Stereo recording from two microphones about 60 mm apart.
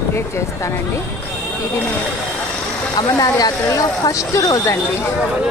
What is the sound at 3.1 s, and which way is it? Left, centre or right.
Speech, left.